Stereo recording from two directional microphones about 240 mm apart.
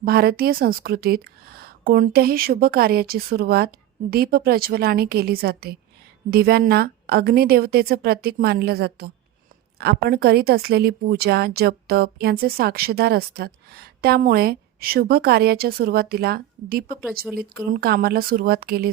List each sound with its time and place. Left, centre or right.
0.0 s a woman's voice: right